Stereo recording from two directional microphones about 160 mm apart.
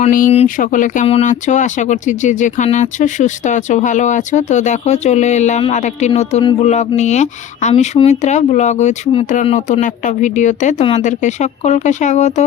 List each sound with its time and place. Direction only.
0.4 s speech: 55° left (ahead or behind)
1.0 s speech: 35° left (ahead or behind)
1.3 s speech: 50° left (ahead or behind)